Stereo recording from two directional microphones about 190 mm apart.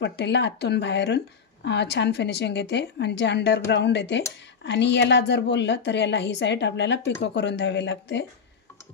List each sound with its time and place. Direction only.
0.0 s speech: 65° left (ahead or behind)